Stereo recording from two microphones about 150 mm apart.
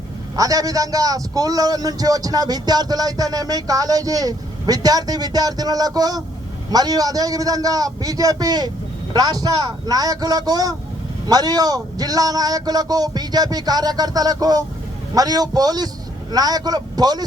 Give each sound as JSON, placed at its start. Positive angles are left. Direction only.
{"t": 0.3, "sound": "a man's voice", "side_deg": -25}